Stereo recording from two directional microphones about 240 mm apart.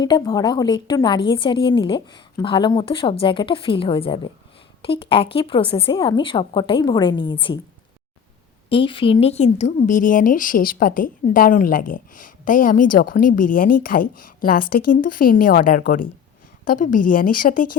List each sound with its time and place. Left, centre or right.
0.0 s a woman's voice: centre
8.7 s a woman's voice: left